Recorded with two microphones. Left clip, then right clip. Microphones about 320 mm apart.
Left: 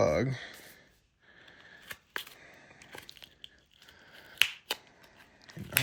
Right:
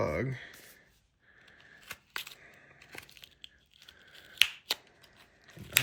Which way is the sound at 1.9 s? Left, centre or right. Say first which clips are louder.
Left 1 dB; centre.